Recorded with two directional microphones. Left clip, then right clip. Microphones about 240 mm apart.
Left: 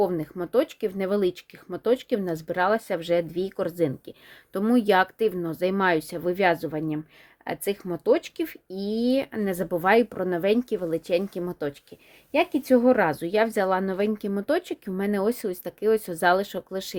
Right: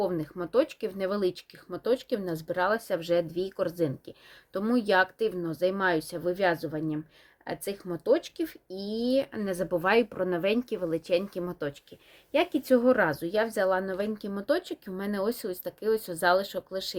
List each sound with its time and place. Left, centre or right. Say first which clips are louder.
0.0 s a woman's voice: left 5 dB; left